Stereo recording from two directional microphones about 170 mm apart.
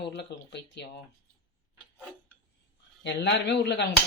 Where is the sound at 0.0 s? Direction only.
80° left.